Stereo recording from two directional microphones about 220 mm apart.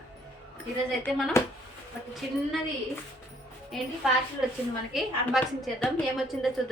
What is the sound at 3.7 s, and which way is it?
Speech, centre (ahead or behind).